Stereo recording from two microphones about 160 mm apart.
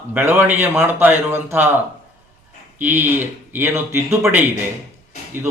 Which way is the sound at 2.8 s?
15° right (ahead or behind).